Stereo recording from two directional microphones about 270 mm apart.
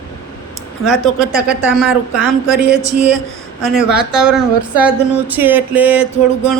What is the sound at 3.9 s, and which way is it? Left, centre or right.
A man's voice, centre.